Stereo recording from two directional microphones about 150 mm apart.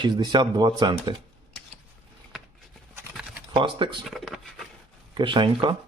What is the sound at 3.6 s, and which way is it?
Speech, 30° right (ahead or behind).